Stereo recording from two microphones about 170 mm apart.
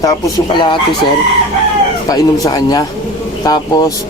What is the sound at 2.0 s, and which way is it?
Speech, 20° left (ahead or behind).